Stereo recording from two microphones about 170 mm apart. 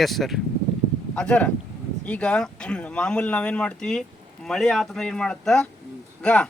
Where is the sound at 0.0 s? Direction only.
Centre (ahead or behind).